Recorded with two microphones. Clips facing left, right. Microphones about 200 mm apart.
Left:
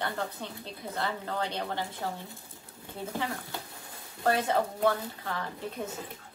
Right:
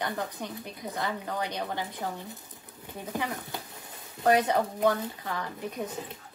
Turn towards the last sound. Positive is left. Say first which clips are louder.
# right 2 dB
turn(degrees=-10)  # may be behind; listen again after turning